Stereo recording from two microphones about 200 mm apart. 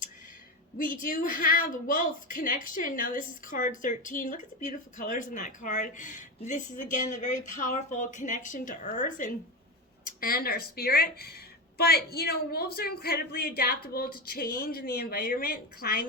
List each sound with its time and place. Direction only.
1.0 s a woman's voice: 45° left (ahead or behind)